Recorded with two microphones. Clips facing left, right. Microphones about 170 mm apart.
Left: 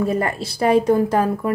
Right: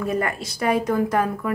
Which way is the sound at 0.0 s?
30° left (ahead or behind).